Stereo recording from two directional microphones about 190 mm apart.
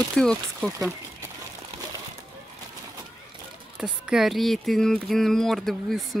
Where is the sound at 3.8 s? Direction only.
5° right (ahead or behind).